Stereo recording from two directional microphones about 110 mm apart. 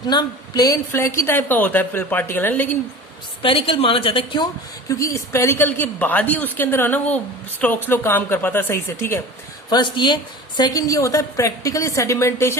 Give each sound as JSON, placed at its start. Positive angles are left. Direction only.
{"t": 0.0, "sound": "a woman's voice", "side_deg": 40}
{"t": 0.9, "sound": "a woman's voice", "side_deg": 20}
{"t": 3.4, "sound": "a woman's voice", "side_deg": 55}
{"t": 4.9, "sound": "a woman's voice", "side_deg": 30}
{"t": 9.6, "sound": "a woman's voice", "side_deg": 40}